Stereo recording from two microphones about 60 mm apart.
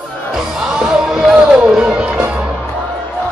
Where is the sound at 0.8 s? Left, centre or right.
Centre.